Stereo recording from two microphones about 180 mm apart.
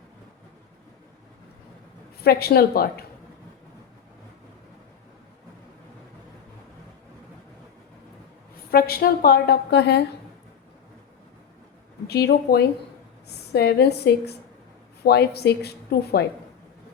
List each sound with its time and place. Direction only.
2.2 s a woman's voice: 60° left (ahead or behind)
8.7 s a woman's voice: 55° left (ahead or behind)
12.0 s a woman's voice: 60° left (ahead or behind)